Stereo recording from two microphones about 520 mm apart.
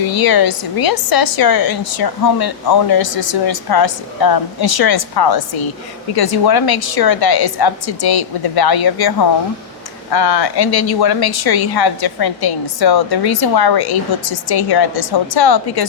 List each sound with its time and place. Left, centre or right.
0.1 s speech: left